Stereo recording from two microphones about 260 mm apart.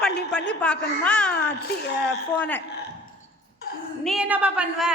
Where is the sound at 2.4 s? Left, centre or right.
Centre.